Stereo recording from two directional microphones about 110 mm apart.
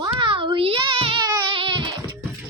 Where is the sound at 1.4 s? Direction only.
50° right (ahead or behind).